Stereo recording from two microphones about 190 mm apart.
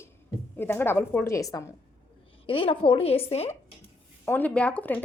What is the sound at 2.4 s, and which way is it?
A woman's voice, 30° left (ahead or behind).